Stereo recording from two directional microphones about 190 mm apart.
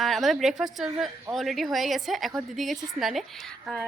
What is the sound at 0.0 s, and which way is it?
Speech, centre (ahead or behind).